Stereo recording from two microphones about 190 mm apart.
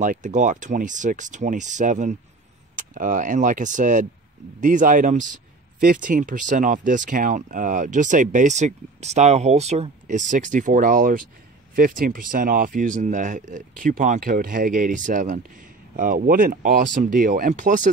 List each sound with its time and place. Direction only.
0.0 s speech: 40° right (ahead or behind)